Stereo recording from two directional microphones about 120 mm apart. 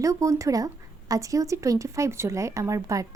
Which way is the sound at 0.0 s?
25° right (ahead or behind).